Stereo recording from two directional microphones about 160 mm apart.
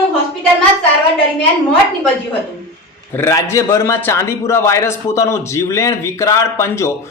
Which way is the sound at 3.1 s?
15° left (ahead or behind).